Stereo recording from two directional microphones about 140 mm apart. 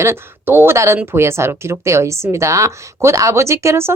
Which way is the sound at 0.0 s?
15° right (ahead or behind).